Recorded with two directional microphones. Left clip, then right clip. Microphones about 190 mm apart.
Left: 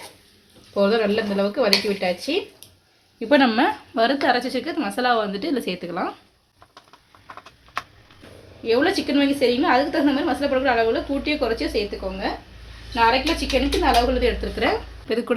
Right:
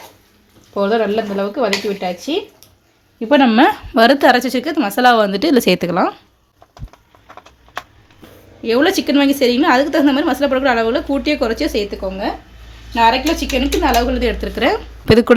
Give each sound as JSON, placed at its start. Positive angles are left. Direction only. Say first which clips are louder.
{"t": 0.7, "sound": "a woman's voice", "louder": "right 3 dB", "side_deg": -25}
{"t": 8.6, "sound": "a woman's voice", "louder": "right 5 dB", "side_deg": -60}
{"t": 12.9, "sound": "a woman's voice", "louder": "right 5 dB", "side_deg": -55}